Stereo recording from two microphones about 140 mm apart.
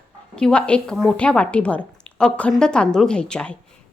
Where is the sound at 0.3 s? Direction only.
5° left (ahead or behind).